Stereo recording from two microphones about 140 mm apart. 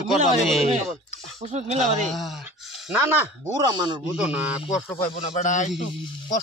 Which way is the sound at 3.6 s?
30° right (ahead or behind).